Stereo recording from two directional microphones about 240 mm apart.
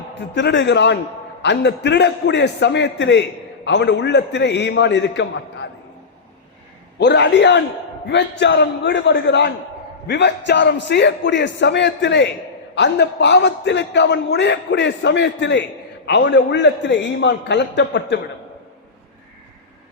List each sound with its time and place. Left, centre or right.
0.3 s a man's voice: left
7.0 s a man's voice: left